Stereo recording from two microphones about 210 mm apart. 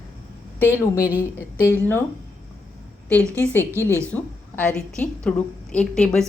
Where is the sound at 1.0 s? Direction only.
10° right (ahead or behind).